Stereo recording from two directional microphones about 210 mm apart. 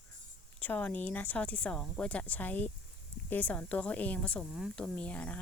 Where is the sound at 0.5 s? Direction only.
10° left (ahead or behind).